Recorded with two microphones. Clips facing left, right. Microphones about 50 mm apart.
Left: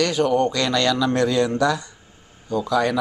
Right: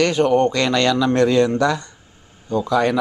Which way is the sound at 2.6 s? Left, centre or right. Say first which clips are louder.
Right 2 dB; centre.